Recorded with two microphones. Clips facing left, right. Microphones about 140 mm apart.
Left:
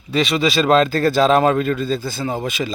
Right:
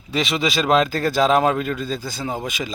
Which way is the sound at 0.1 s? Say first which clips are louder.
Left 4 dB; 20° right (ahead or behind).